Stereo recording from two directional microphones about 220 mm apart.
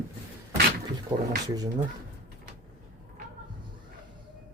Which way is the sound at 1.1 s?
15° right (ahead or behind).